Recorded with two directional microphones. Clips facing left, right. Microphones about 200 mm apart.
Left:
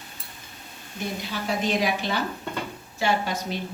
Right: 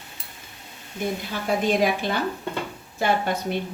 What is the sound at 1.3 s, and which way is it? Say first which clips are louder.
A woman's voice: right 3 dB; 50° right (ahead or behind).